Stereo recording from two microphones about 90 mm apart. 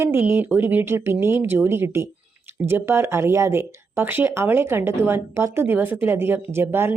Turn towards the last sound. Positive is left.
turn(degrees=-25)  # may be behind; listen again after turning